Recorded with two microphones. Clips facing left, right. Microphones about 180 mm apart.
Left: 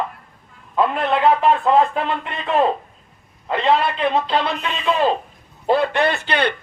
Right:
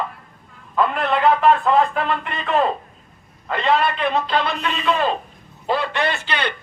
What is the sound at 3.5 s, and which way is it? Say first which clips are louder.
Speech: left 1 dB; 30° left (ahead or behind).